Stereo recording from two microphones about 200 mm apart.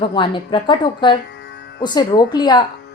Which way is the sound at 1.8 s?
20° left (ahead or behind).